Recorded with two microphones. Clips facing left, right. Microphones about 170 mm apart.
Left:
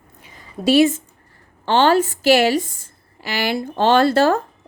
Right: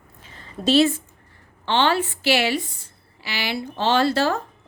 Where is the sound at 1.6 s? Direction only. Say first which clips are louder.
Left 5 dB; 45° left (ahead or behind).